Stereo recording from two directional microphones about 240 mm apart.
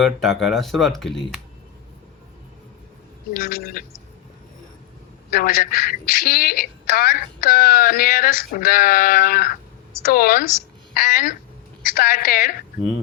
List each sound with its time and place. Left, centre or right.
0.0 s speech: centre
3.3 s speech: left
5.3 s speech: left